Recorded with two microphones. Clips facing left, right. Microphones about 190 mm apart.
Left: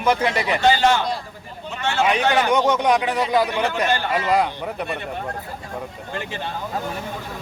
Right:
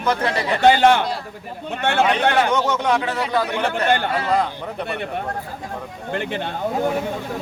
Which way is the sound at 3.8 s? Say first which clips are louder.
Right 3 dB; 55° right (ahead or behind).